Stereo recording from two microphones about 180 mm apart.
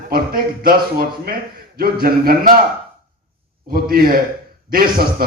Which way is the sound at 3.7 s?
55° right (ahead or behind).